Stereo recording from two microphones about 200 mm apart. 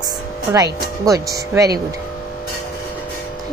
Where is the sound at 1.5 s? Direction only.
15° right (ahead or behind).